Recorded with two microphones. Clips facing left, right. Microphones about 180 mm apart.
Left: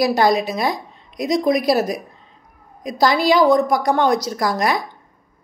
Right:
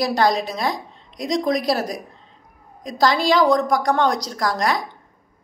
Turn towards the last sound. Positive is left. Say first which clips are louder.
# left 2 dB
turn(degrees=5)  # may be behind; listen again after turning